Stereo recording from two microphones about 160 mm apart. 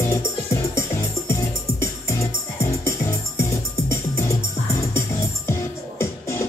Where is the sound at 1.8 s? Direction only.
15° left (ahead or behind).